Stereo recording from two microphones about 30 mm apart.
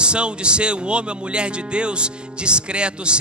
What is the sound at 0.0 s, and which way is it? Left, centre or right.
Speech, right.